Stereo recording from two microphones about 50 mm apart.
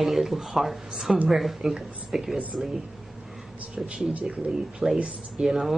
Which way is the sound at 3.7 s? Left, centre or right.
Right.